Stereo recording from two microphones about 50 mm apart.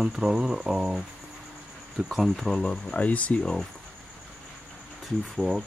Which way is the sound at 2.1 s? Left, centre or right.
Centre.